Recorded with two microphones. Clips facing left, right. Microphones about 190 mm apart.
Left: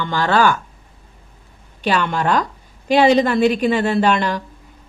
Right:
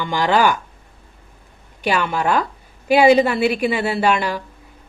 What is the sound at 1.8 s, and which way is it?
A woman's voice, 10° right (ahead or behind).